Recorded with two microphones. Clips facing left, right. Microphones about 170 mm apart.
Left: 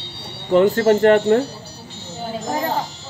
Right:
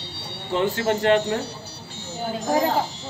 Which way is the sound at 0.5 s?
50° left (ahead or behind).